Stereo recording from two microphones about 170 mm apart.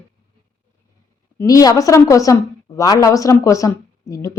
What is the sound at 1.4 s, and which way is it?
A woman's voice, 20° left (ahead or behind).